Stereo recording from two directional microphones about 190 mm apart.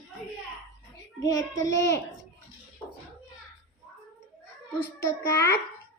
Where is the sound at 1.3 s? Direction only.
15° left (ahead or behind).